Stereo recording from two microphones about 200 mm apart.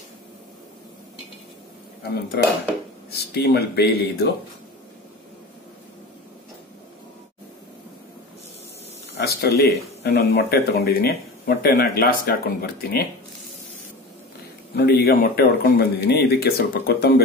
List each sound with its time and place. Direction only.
3.1 s speech: 55° left (ahead or behind)
9.1 s speech: 55° left (ahead or behind)
14.8 s speech: 50° left (ahead or behind)